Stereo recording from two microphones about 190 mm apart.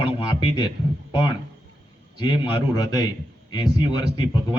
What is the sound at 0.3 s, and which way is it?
Speech, 20° left (ahead or behind).